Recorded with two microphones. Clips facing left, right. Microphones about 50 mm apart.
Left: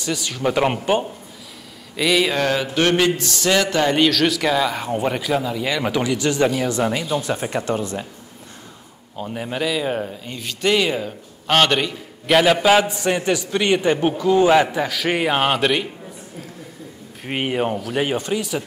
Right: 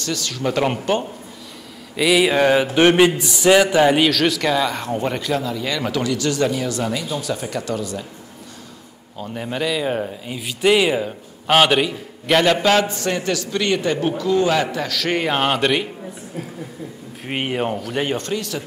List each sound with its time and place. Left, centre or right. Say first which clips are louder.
0.0 s speech: left 1 dB; centre
2.0 s speech: right 3 dB; centre; by 8.1 s left
9.1 s speech: even; centre
17.2 s a man's voice: left 1 dB; centre